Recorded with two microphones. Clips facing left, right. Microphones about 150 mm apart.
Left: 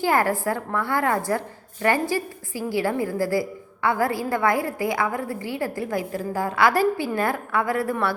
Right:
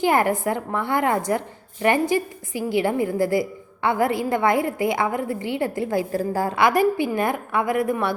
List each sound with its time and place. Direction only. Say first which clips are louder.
0.0 s a woman's voice: right 2 dB; 20° right (ahead or behind)
6.6 s a woman's voice: right 1 dB; 20° right (ahead or behind)